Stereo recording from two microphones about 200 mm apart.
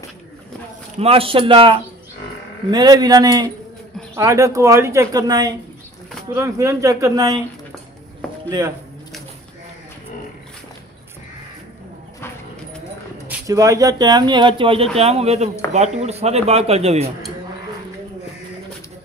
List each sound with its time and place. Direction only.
0.9 s speech: 30° right (ahead or behind)
8.5 s speech: 20° right (ahead or behind)
13.3 s speech: 15° right (ahead or behind); by 17.1 s 30° right (ahead or behind)